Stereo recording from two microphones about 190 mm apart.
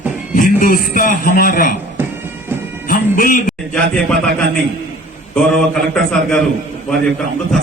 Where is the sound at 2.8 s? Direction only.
45° left (ahead or behind).